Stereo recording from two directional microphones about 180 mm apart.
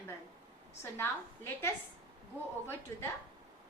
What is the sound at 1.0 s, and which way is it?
Speech, 15° left (ahead or behind).